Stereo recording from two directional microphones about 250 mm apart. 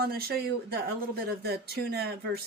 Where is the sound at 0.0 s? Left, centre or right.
Right.